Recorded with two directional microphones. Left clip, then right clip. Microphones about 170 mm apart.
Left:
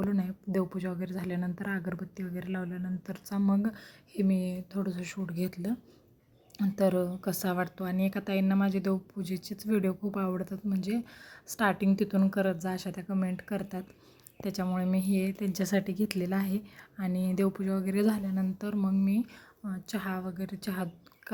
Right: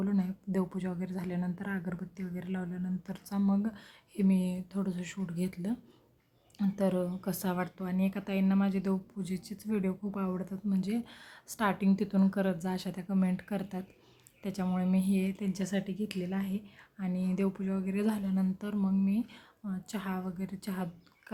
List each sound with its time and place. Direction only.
0.0 s a woman's voice: 15° left (ahead or behind)